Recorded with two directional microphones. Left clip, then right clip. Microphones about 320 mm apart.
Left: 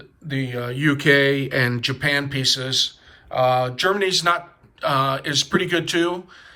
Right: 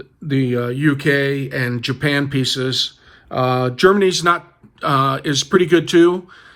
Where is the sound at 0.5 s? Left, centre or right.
Centre.